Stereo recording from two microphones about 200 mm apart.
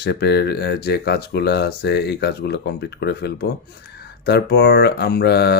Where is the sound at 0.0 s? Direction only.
55° left (ahead or behind).